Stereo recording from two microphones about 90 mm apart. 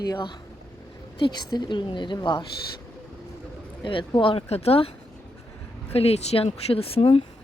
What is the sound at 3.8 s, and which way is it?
Speech, 70° left (ahead or behind).